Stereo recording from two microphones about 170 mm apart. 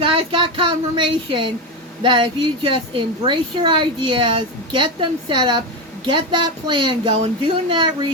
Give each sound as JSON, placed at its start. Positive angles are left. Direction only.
{"t": 0.0, "sound": "a woman's voice", "side_deg": -30}